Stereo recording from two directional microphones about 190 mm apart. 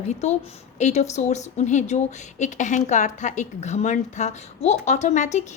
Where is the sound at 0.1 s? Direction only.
40° left (ahead or behind).